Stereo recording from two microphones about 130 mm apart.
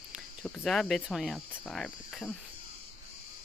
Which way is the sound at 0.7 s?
5° left (ahead or behind).